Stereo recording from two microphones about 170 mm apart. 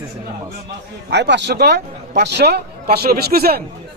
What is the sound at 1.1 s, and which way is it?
A man's voice, 90° right.